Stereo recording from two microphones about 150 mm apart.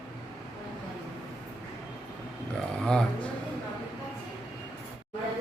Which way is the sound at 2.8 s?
5° left (ahead or behind).